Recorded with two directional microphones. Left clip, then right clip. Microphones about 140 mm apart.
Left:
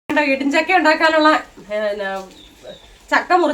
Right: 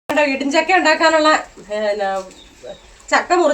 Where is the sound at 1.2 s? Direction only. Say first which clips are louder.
Even; 10° left (ahead or behind).